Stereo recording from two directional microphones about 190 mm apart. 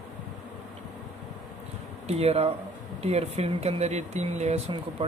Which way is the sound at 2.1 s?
30° right (ahead or behind).